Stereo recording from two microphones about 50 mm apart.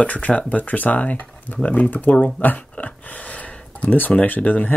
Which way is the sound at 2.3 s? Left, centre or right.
Left.